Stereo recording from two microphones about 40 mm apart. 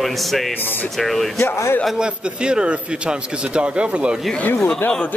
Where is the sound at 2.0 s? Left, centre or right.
Right.